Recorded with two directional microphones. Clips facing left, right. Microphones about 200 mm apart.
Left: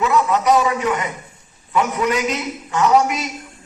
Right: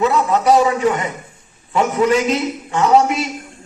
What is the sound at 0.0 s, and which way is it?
A man's voice, 30° right (ahead or behind).